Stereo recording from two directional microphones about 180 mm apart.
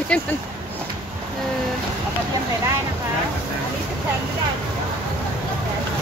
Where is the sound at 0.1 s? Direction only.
5° left (ahead or behind).